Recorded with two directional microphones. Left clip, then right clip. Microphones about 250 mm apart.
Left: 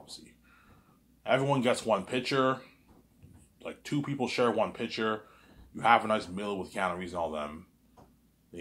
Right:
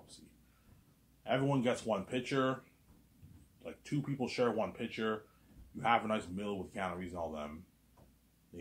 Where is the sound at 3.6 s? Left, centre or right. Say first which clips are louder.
Left 6 dB; centre.